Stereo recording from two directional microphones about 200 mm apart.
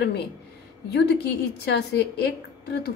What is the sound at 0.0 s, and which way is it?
A woman's voice, 55° left (ahead or behind).